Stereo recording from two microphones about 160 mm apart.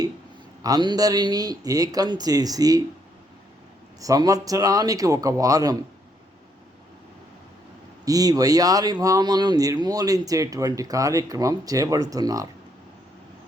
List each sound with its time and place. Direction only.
0.6 s speech: 25° right (ahead or behind)
4.0 s speech: 20° right (ahead or behind)
8.0 s speech: 20° right (ahead or behind)